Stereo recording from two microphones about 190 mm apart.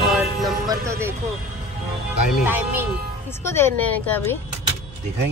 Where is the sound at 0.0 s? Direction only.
Centre (ahead or behind).